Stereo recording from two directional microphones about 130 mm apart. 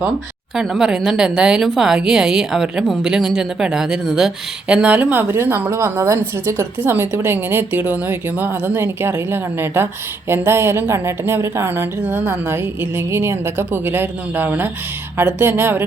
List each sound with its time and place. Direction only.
0.5 s a woman's voice: centre (ahead or behind)